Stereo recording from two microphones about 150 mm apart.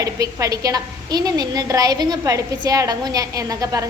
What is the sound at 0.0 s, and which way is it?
A woman's voice, 20° right (ahead or behind).